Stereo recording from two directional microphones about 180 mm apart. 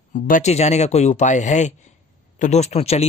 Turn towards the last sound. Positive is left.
turn(degrees=35)  # may be behind; listen again after turning